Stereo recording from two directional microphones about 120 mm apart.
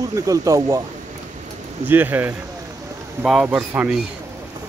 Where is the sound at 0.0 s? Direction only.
30° right (ahead or behind).